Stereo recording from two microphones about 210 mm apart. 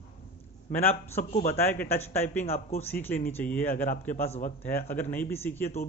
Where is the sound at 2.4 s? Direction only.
30° left (ahead or behind).